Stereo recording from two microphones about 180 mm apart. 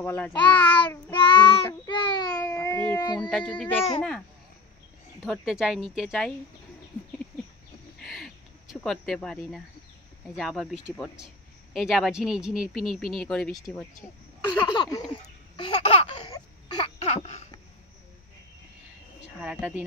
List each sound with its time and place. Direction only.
0.0 s child singing: 10° left (ahead or behind)
1.1 s child singing: 30° left (ahead or behind); by 3.0 s 10° left (ahead or behind)
3.2 s speech: centre (ahead or behind)
5.2 s speech: centre (ahead or behind)
8.0 s a sound: centre (ahead or behind)
10.3 s speech: centre (ahead or behind)
14.7 s a sound: 20° left (ahead or behind)
15.5 s laughter: 30° left (ahead or behind)
17.0 s a sound: 35° left (ahead or behind)
19.2 s speech: 5° right (ahead or behind)